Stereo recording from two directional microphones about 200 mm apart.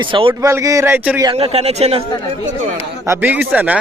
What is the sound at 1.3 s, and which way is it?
Speech, 30° right (ahead or behind).